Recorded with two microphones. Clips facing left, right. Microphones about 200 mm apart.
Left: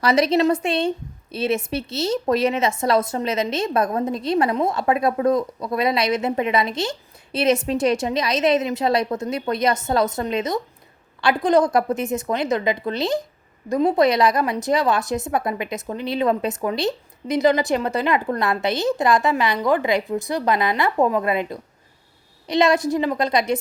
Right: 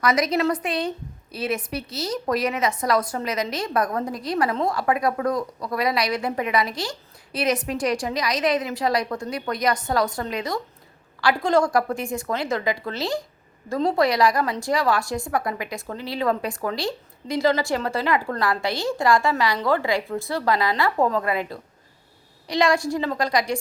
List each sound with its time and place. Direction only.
0.0 s a woman's voice: 30° left (ahead or behind)